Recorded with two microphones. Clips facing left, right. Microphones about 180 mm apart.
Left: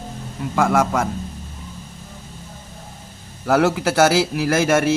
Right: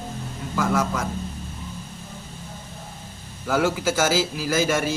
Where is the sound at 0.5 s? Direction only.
80° left.